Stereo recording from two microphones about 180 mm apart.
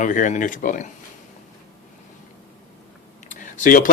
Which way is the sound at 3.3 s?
45° left (ahead or behind).